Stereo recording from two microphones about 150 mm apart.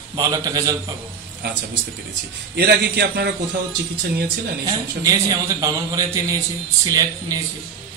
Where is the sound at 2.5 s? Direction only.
90° right.